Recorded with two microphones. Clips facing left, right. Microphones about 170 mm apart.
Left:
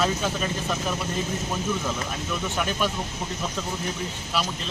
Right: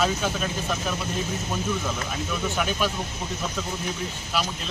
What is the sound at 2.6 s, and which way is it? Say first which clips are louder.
Speech: even; centre (ahead or behind).